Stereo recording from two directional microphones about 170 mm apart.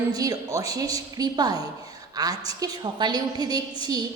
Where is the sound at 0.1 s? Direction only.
20° right (ahead or behind).